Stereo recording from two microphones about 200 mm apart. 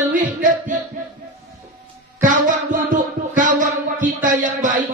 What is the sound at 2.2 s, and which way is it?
Music, 40° right (ahead or behind).